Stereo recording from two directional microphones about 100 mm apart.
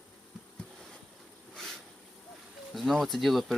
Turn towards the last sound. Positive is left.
turn(degrees=0)  # may be behind; listen again after turning